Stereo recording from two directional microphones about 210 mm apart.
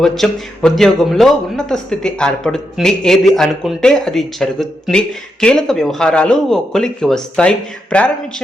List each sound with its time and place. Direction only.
0.0 s a man's voice: centre (ahead or behind)